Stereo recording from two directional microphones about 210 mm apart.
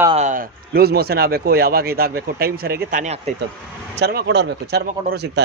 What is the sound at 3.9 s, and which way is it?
Speech, 55° right (ahead or behind).